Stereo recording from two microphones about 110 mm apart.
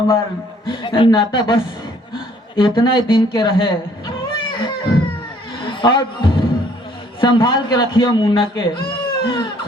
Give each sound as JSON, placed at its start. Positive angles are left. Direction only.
{"t": 0.7, "sound": "a woman's voice", "side_deg": 50}
{"t": 4.3, "sound": "a sound", "side_deg": 50}
{"t": 5.5, "sound": "a man's voice", "side_deg": 45}